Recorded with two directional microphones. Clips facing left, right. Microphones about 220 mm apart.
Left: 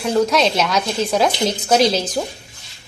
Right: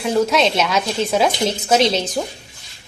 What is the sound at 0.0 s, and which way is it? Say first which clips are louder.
A woman's voice: even; centre (ahead or behind).